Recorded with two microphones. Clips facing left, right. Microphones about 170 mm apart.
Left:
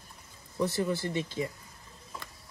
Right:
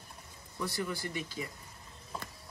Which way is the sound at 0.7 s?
25° left (ahead or behind).